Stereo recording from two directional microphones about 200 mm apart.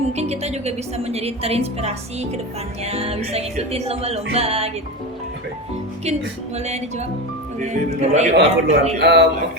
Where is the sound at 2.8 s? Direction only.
30° right (ahead or behind).